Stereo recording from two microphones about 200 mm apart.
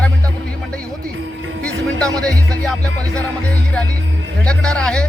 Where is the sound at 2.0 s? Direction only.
20° right (ahead or behind).